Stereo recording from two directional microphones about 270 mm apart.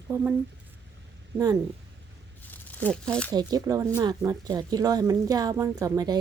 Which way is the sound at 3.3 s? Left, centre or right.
Centre.